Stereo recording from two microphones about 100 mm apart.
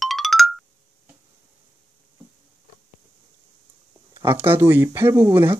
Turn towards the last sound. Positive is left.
turn(degrees=-25)  # may be behind; listen again after turning